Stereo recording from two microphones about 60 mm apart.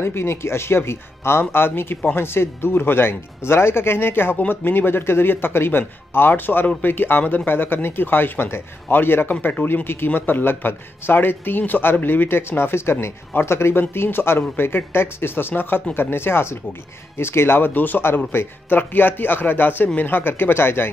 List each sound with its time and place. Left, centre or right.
0.0 s speech: left